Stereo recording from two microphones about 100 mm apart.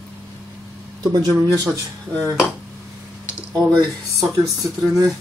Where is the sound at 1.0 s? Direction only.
35° right (ahead or behind).